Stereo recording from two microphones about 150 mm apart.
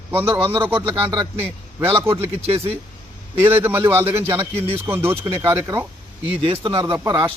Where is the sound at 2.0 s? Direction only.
15° right (ahead or behind).